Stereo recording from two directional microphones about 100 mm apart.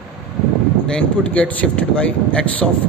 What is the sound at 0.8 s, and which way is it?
Speech, 10° left (ahead or behind).